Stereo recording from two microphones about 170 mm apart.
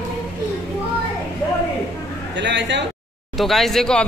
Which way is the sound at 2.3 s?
90° right.